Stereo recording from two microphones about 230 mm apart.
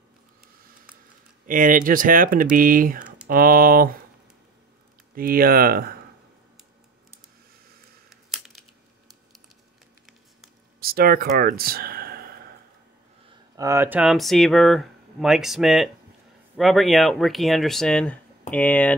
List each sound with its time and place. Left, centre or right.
1.5 s speech: right
5.1 s speech: right
8.1 s a sound: centre
10.8 s speech: right
13.6 s speech: centre